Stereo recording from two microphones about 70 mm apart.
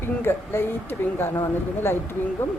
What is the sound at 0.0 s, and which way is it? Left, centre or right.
A woman's voice, left.